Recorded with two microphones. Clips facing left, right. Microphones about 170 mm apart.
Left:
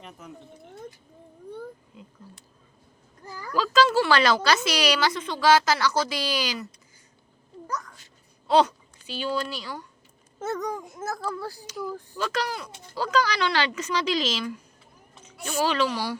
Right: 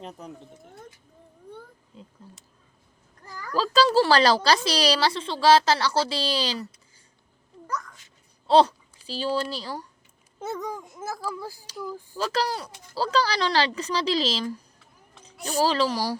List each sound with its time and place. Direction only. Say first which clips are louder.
0.0 s speech: right 5 dB; 35° right (ahead or behind)
3.5 s speech: right 1 dB; 35° right (ahead or behind)
8.4 s speech: right 2 dB; 30° right (ahead or behind)
10.6 s speech: left 2 dB; 5° right (ahead or behind)
12.1 s speech: right 3 dB; 30° right (ahead or behind)